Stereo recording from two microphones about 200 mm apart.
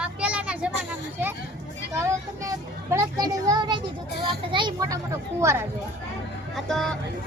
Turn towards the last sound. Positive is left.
turn(degrees=5)  # may be behind; listen again after turning